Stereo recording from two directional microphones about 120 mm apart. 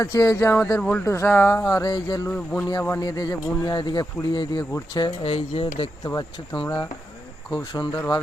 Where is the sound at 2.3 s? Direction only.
10° left (ahead or behind).